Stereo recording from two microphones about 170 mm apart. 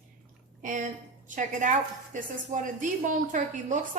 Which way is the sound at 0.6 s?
50° right (ahead or behind).